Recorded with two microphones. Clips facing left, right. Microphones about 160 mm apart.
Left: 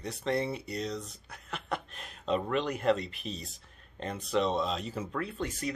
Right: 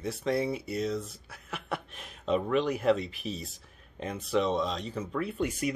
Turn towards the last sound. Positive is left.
turn(degrees=-10)  # may be behind; listen again after turning